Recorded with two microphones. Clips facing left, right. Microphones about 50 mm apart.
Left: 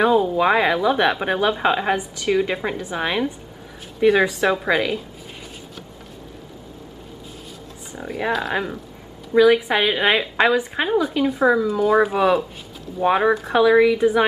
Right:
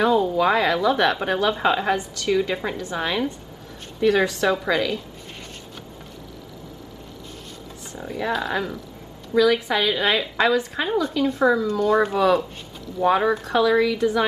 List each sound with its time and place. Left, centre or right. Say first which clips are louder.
0.0 s speech: left 2 dB; centre
0.4 s a woman's voice: left 2 dB; left
7.9 s speech: left 2 dB; centre
9.3 s a woman's voice: left 4 dB; left
10.9 s speech: left 2 dB; centre
13.5 s a woman's voice: left 5 dB; left